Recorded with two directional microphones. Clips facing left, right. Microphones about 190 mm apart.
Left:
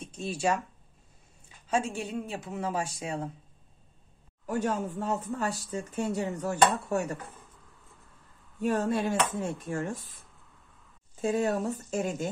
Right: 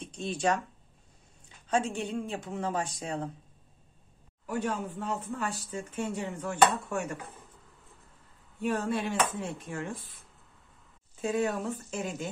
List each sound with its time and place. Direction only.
0.0 s speech: 5° left (ahead or behind)
1.7 s a woman's voice: 5° left (ahead or behind)
4.5 s speech: 40° left (ahead or behind)
8.5 s speech: 40° left (ahead or behind)